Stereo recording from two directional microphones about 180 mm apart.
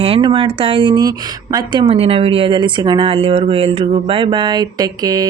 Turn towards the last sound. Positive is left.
turn(degrees=-20)  # may be behind; listen again after turning